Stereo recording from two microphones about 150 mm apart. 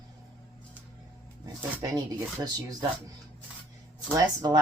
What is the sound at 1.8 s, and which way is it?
Speech, 25° right (ahead or behind).